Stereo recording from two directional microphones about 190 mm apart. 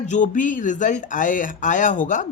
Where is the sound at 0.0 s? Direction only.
40° left (ahead or behind).